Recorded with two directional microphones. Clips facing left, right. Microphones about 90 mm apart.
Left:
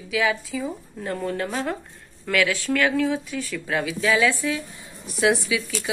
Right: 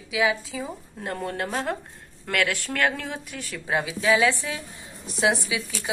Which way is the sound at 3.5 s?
20° right (ahead or behind).